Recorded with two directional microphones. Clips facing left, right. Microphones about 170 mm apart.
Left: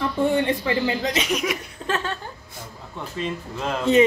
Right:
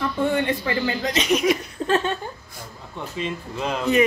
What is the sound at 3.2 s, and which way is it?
Speech, centre (ahead or behind).